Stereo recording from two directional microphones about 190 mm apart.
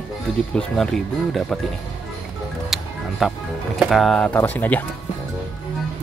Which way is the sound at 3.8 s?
Centre (ahead or behind).